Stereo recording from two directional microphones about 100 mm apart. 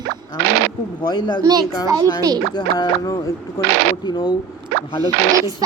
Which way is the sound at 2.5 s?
45° left (ahead or behind).